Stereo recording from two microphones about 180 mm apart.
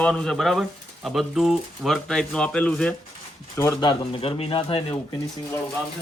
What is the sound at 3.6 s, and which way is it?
Speech, 20° left (ahead or behind).